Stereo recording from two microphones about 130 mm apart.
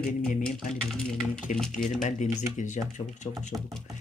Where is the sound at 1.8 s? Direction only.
70° left (ahead or behind).